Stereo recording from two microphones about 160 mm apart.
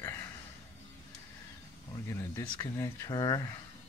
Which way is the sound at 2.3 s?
15° left (ahead or behind).